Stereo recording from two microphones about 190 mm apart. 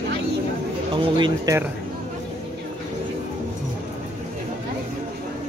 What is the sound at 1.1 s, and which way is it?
Speech, 25° right (ahead or behind).